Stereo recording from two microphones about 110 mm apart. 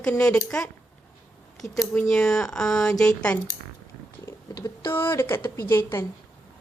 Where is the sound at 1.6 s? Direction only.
30° left (ahead or behind).